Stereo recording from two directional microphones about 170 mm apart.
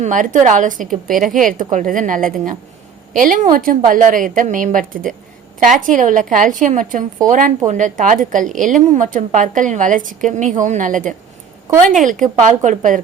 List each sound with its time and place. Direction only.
0.0 s a woman's voice: 50° right (ahead or behind)